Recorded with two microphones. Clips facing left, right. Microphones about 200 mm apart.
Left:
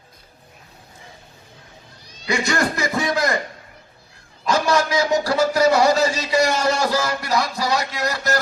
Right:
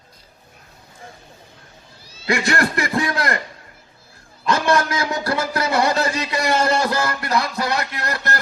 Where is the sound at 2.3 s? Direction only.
55° right (ahead or behind).